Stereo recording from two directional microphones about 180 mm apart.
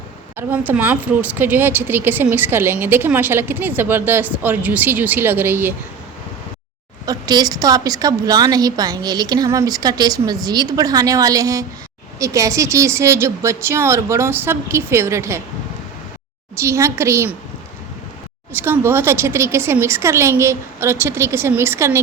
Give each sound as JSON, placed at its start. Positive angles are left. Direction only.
{"t": 0.3, "sound": "speech", "side_deg": -10}
{"t": 7.0, "sound": "a woman's voice", "side_deg": -20}
{"t": 16.6, "sound": "speech", "side_deg": -15}
{"t": 18.5, "sound": "speech", "side_deg": -10}